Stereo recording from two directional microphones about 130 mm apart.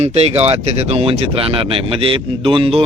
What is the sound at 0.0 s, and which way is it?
Speech, 55° right (ahead or behind).